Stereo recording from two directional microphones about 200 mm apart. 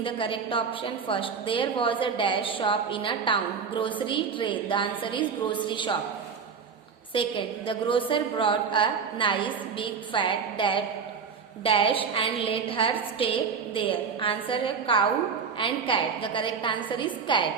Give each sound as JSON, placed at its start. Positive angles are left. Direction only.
{"t": 0.0, "sound": "a woman's voice", "side_deg": 25}
{"t": 7.1, "sound": "a woman's voice", "side_deg": 25}